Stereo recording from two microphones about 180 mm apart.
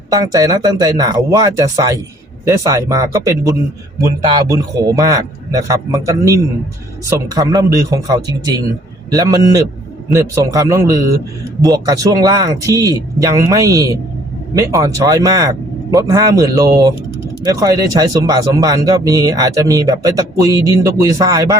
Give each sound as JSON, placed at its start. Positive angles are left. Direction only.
{"t": 0.1, "sound": "a man's voice", "side_deg": -20}